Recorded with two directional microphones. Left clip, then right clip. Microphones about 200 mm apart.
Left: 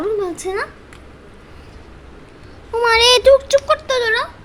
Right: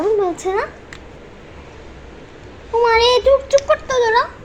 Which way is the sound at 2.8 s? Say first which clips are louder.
Left 1 dB; 50° left (ahead or behind).